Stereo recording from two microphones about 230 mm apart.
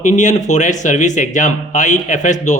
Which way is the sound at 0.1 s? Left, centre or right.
Left.